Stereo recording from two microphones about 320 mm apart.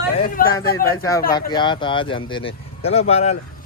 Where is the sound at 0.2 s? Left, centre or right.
Left.